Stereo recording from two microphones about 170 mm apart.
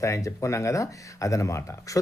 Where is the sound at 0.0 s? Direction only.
20° left (ahead or behind).